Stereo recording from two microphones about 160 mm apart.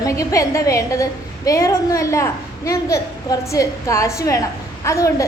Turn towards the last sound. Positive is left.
turn(degrees=20)  # may be behind; listen again after turning